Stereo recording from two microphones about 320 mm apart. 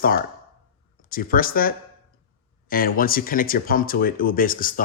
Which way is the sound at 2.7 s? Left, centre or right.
Left.